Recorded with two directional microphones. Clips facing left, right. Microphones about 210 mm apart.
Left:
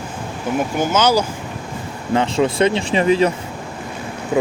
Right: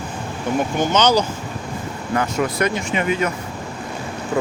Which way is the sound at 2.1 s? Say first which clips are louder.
Left 4 dB; 25° left (ahead or behind).